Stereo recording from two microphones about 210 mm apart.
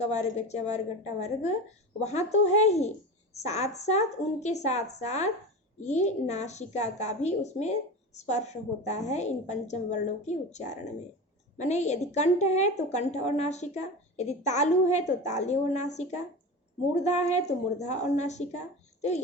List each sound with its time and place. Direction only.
0.1 s a woman's voice: 30° left (ahead or behind)